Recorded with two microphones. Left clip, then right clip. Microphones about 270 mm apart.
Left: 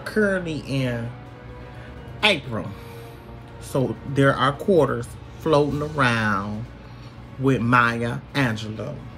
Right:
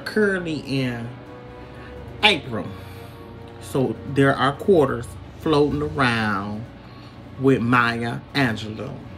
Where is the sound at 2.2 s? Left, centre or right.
Centre.